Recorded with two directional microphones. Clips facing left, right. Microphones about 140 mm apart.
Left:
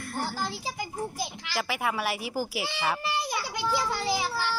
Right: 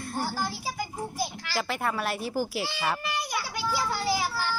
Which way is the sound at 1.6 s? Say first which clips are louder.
Even; 10° left (ahead or behind).